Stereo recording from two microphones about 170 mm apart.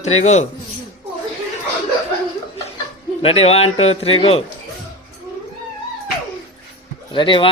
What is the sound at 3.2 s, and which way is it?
A man's voice, 35° left (ahead or behind).